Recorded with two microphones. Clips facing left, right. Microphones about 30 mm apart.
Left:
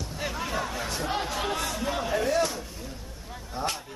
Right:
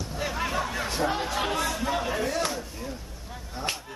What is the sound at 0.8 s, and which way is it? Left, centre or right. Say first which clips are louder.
Speech: right 2 dB; centre.